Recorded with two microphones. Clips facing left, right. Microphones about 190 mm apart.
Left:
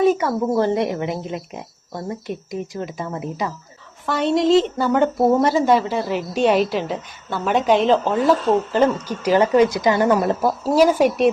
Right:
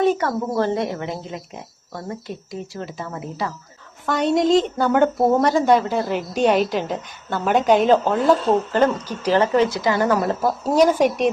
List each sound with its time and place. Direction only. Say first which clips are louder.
0.0 s speech: left 2 dB; 10° left (ahead or behind)
4.0 s a woman's voice: even; centre (ahead or behind); by 10.5 s 20° left (ahead or behind)
10.6 s speech: left 1 dB; 10° left (ahead or behind)